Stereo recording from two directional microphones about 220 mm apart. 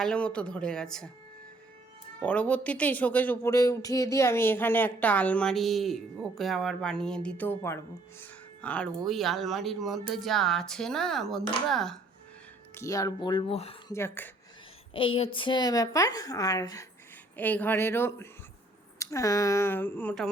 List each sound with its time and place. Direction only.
0.0 s speech: 5° left (ahead or behind)
2.2 s speech: 5° left (ahead or behind)
12.7 s speech: 15° left (ahead or behind)
13.9 s speech: 10° left (ahead or behind)
14.9 s speech: 25° left (ahead or behind); by 20.3 s 5° left (ahead or behind)